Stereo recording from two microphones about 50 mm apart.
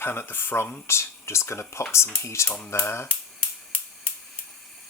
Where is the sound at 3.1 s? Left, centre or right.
Left.